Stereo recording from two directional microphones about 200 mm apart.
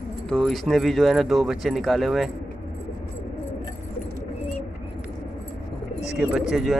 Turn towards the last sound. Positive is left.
turn(degrees=0)  # may be behind; listen again after turning